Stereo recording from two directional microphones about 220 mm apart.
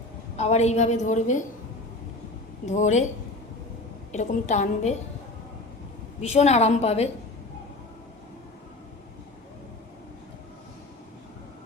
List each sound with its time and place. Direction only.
0.3 s a woman's voice: 30° left (ahead or behind)
2.6 s a woman's voice: 35° left (ahead or behind)
4.1 s a woman's voice: 35° left (ahead or behind)
6.2 s a woman's voice: 30° left (ahead or behind)